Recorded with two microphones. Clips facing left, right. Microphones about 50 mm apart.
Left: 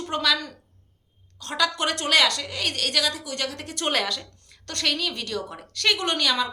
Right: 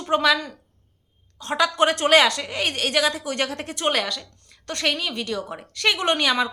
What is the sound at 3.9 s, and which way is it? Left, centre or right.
Speech, centre.